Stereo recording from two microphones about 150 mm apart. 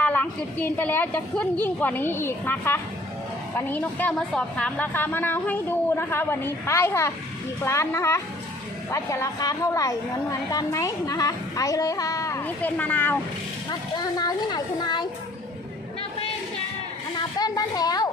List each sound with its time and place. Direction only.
0.0 s a woman's voice: 10° left (ahead or behind)
12.5 s a woman's voice: 10° left (ahead or behind)
13.7 s a woman's voice: 30° left (ahead or behind)
17.4 s a woman's voice: 25° left (ahead or behind)